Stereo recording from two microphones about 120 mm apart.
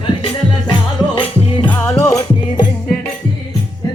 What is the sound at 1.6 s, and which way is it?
Music, 20° left (ahead or behind).